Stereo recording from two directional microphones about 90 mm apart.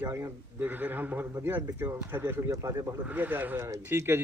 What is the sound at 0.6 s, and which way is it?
Speech, 20° right (ahead or behind).